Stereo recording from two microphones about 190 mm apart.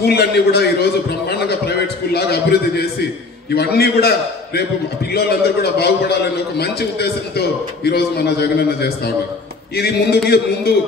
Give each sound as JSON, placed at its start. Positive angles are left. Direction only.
{"t": 0.0, "sound": "a man's voice", "side_deg": 60}
{"t": 5.1, "sound": "a man's voice", "side_deg": 55}